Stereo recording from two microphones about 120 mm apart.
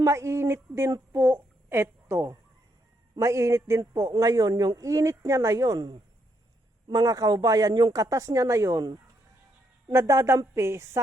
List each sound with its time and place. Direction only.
0.0 s a woman's voice: 25° right (ahead or behind)
9.9 s a man's voice: 20° right (ahead or behind)